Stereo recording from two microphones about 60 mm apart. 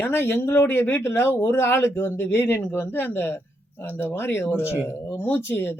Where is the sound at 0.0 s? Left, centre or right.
Left.